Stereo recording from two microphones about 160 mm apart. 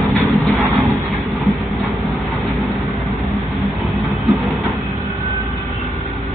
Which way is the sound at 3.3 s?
Centre (ahead or behind).